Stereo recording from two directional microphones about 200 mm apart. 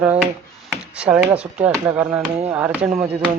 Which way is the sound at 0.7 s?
5° right (ahead or behind).